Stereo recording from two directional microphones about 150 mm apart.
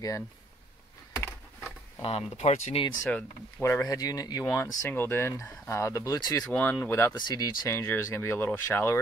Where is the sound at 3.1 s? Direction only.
10° left (ahead or behind); by 4.6 s 25° left (ahead or behind).